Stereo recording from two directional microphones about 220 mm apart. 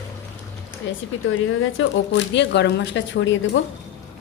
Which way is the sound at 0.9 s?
55° left (ahead or behind).